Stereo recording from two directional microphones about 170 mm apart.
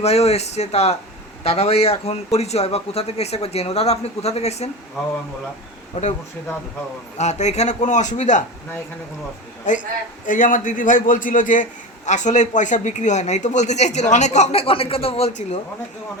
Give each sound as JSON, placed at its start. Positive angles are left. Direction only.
{"t": 0.0, "sound": "speech", "side_deg": 40}
{"t": 5.9, "sound": "speech", "side_deg": 45}
{"t": 7.2, "sound": "speech", "side_deg": 40}
{"t": 9.7, "sound": "speech", "side_deg": 45}